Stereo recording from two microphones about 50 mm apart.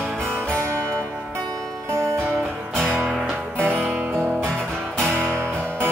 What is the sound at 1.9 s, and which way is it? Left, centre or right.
Music, right.